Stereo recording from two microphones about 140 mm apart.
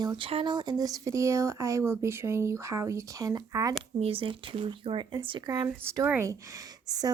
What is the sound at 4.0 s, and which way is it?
A woman's voice, 40° right (ahead or behind).